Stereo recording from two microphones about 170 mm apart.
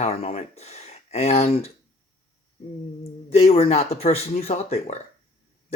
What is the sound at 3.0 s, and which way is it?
Speech, 40° left (ahead or behind).